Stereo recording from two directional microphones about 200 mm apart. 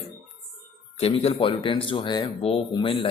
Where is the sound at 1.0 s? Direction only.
30° left (ahead or behind).